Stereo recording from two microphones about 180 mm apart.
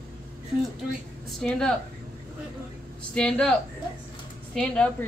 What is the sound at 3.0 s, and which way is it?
Speech, 5° left (ahead or behind).